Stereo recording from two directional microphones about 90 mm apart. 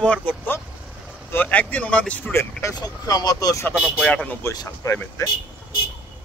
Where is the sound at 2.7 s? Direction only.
45° left (ahead or behind).